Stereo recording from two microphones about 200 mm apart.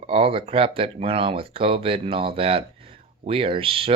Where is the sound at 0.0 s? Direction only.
30° right (ahead or behind).